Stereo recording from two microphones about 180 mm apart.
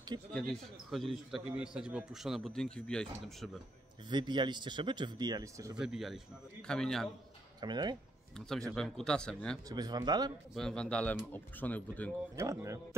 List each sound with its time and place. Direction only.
0.3 s a man's voice: 5° left (ahead or behind)
4.1 s speech: 25° right (ahead or behind)
5.8 s a man's voice: centre (ahead or behind)
7.6 s speech: 25° right (ahead or behind)
8.4 s a man's voice: centre (ahead or behind)
9.7 s speech: 20° right (ahead or behind)
10.5 s a man's voice: 5° left (ahead or behind)
12.4 s speech: 15° right (ahead or behind)